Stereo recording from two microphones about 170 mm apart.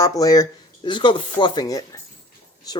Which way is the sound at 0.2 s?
20° left (ahead or behind).